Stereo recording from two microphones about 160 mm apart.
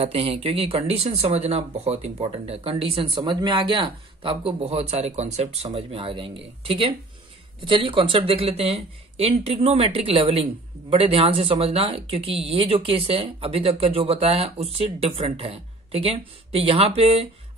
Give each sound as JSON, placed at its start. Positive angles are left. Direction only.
{"t": 0.0, "sound": "speech", "side_deg": -40}